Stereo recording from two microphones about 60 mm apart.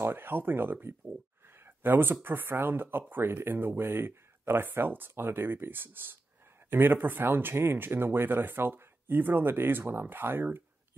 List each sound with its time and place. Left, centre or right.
0.0 s speech: right
1.5 s a sound: right
2.2 s speech: right